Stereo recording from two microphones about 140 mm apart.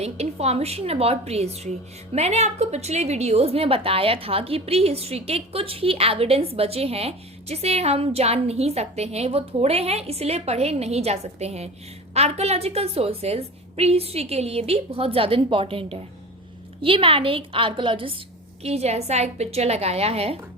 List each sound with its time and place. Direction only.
0.0 s a woman's voice: 50° right (ahead or behind)
18.6 s a woman's voice: 50° right (ahead or behind)